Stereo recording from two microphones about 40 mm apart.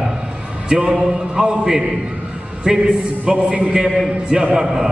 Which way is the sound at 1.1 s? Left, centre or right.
Right.